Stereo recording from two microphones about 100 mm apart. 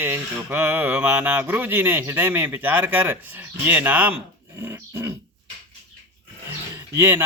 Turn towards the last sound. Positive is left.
turn(degrees=-25)  # may be behind; listen again after turning